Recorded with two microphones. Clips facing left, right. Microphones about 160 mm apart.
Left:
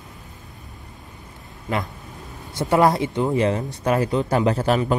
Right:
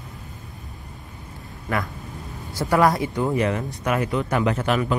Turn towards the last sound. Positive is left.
turn(degrees=35)  # may be behind; listen again after turning